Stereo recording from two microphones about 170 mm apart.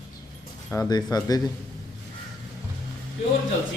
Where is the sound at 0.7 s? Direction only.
20° left (ahead or behind).